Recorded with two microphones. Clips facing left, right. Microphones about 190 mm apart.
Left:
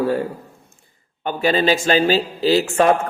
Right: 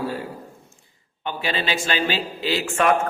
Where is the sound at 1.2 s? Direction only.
45° left (ahead or behind).